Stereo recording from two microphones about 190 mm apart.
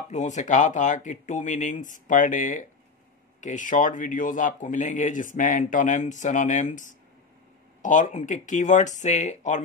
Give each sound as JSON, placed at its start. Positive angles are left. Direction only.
{"t": 0.1, "sound": "speech", "side_deg": 40}